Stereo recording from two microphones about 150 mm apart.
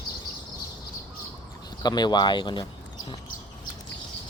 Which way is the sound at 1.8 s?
30° left (ahead or behind).